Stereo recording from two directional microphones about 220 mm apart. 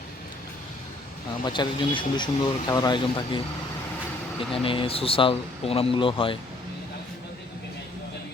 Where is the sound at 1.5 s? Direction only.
20° left (ahead or behind).